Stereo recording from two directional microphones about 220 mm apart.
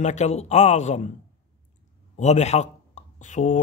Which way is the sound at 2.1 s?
30° left (ahead or behind).